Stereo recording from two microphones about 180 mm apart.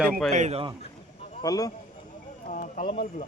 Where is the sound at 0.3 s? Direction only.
40° right (ahead or behind).